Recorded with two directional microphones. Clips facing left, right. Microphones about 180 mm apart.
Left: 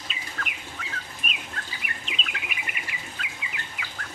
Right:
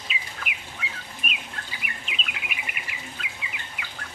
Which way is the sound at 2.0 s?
Centre (ahead or behind).